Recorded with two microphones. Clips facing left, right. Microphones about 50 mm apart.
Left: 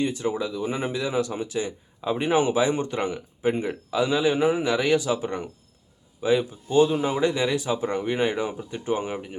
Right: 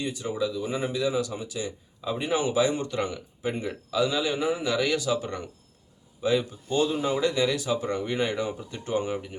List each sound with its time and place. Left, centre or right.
0.0 s speech: left; by 9.4 s centre